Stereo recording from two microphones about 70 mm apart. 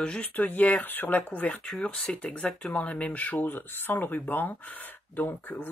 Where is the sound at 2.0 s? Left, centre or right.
Centre.